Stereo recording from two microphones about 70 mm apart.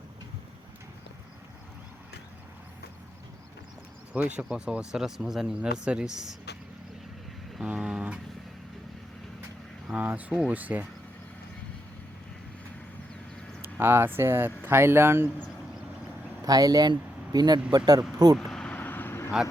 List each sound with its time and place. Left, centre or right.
4.1 s speech: centre
7.6 s vehicle: centre
10.1 s speech: right
13.6 s speech: right
16.5 s speech: right
17.3 s speech: right
18.3 s vehicle: centre
18.7 s vehicle: left